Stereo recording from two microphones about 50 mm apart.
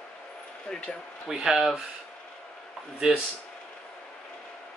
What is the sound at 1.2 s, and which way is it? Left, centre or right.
Speech, centre.